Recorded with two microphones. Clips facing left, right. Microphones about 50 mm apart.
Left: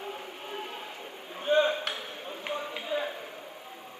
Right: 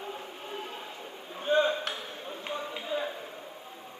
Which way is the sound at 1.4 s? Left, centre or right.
Left.